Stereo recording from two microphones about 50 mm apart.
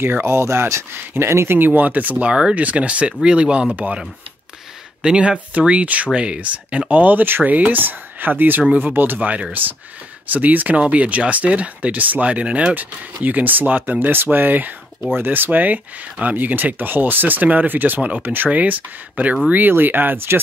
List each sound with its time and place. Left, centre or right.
0.0 s speech: right
0.9 s speech: right
1.3 s speech: right
1.8 s speech: right
5.0 s speech: centre; by 9.2 s right
9.2 s speech: right
12.7 s speech: right